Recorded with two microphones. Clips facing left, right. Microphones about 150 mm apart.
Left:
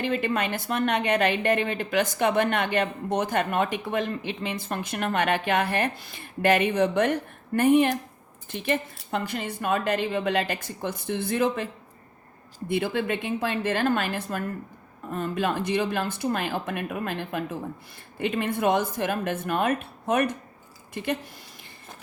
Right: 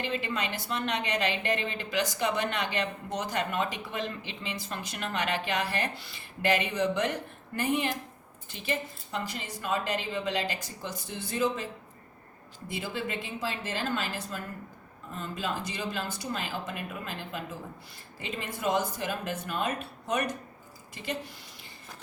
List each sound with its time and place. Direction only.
0.0 s a woman's voice: 55° left (ahead or behind)